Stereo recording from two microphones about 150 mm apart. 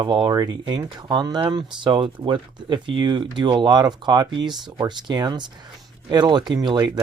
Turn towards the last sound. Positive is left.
turn(degrees=-30)  # may be behind; listen again after turning